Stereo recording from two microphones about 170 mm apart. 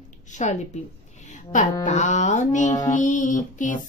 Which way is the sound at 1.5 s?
45° left (ahead or behind).